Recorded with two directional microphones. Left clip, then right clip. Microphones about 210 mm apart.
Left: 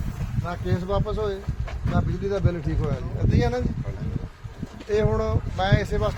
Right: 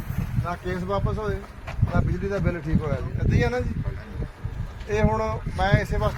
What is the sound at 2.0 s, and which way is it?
Speech, 10° left (ahead or behind).